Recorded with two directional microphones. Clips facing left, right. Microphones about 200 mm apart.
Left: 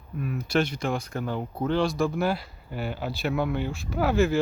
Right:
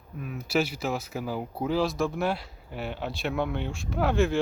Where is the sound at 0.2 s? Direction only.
Centre (ahead or behind).